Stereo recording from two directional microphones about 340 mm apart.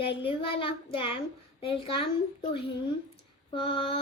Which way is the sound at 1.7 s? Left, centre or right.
Centre.